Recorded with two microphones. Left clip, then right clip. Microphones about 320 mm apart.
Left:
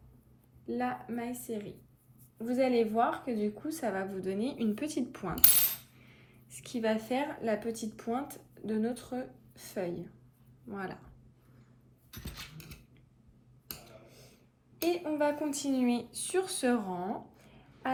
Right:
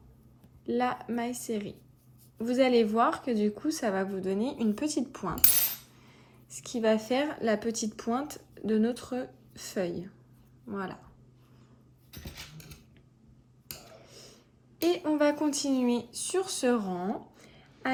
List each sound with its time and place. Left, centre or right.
0.7 s speech: centre
14.1 s a sound: centre
15.0 s speech: centre